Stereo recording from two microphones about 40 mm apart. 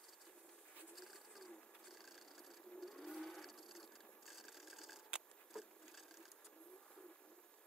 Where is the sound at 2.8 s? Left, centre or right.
Centre.